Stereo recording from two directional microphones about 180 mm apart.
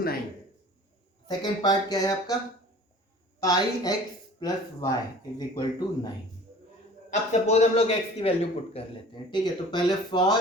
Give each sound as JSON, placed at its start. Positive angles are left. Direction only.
{"t": 1.3, "sound": "speech", "side_deg": 20}
{"t": 3.4, "sound": "speech", "side_deg": 20}
{"t": 7.1, "sound": "a man's voice", "side_deg": 40}